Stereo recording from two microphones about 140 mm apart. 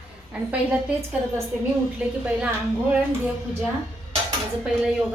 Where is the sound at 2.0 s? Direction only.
10° right (ahead or behind).